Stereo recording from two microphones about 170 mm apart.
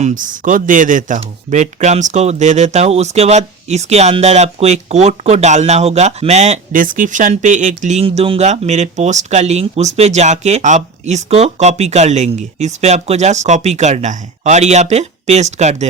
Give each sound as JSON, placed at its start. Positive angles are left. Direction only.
{"t": 0.0, "sound": "speech", "side_deg": -50}